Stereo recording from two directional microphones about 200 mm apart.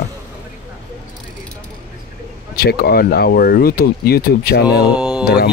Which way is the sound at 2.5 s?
50° left (ahead or behind).